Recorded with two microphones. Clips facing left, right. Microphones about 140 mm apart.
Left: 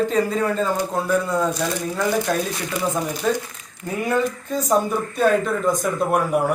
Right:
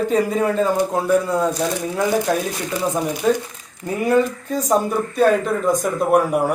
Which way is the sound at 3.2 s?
5° right (ahead or behind).